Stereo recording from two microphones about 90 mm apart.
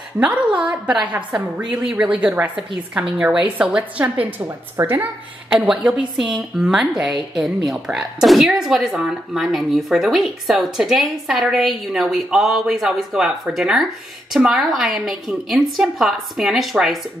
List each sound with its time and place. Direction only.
0.2 s a woman's voice: 15° right (ahead or behind)
4.8 s speech: 30° right (ahead or behind)
5.5 s a woman's voice: 10° right (ahead or behind)